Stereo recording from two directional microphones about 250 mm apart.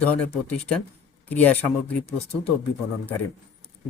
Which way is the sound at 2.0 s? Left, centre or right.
Left.